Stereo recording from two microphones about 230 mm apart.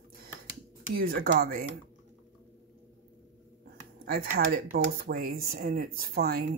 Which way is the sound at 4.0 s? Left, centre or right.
Right.